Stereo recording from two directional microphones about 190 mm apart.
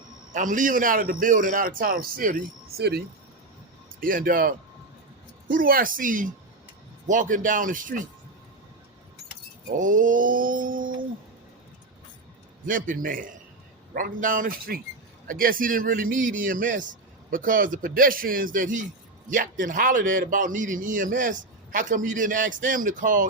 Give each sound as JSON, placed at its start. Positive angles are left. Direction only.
{"t": 0.3, "sound": "a man's voice", "side_deg": -45}
{"t": 4.0, "sound": "a man's voice", "side_deg": -45}
{"t": 9.7, "sound": "a man's voice", "side_deg": -45}
{"t": 12.6, "sound": "a man's voice", "side_deg": -45}